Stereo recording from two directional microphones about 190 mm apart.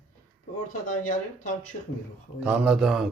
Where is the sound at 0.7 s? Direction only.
45° left (ahead or behind).